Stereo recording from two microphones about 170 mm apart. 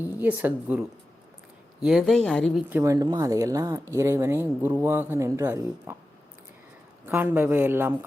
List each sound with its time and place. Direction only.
0.2 s a woman's voice: 10° right (ahead or behind)
2.6 s a woman's voice: 15° right (ahead or behind)
7.0 s a woman's voice: 10° right (ahead or behind)